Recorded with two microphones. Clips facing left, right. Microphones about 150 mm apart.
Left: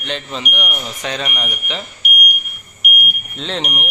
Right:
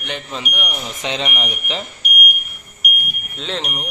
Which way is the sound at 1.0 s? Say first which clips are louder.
Right 1 dB; 20° right (ahead or behind).